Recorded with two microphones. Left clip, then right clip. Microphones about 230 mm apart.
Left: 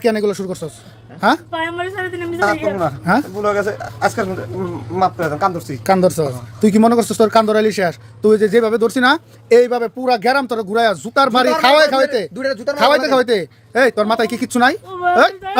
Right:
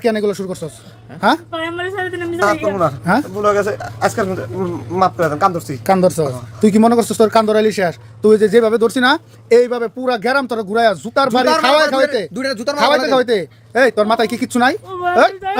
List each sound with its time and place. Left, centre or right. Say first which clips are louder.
0.0 s speech: even; centre
3.3 s speech: right 2 dB; centre
5.8 s speech: even; centre
12.3 s speech: even; right
12.8 s speech: even; centre